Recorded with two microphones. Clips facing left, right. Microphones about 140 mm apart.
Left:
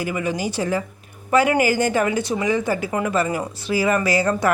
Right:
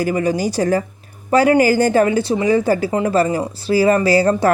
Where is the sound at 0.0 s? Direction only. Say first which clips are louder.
Right 6 dB; 40° right (ahead or behind).